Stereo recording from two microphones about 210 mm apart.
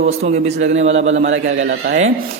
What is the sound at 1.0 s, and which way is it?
Speech, 65° right (ahead or behind).